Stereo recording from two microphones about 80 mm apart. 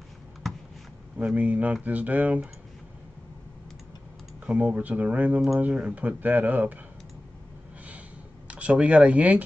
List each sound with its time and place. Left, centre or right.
0.4 s a sound: centre
1.1 s speech: centre
4.5 s speech: centre
8.5 s speech: centre